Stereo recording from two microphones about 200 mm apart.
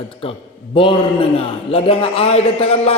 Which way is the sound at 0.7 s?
25° left (ahead or behind).